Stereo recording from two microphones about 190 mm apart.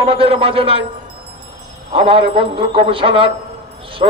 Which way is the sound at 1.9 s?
30° right (ahead or behind).